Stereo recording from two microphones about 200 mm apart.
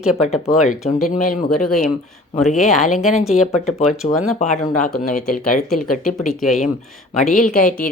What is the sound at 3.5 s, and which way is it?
Speech, 35° left (ahead or behind).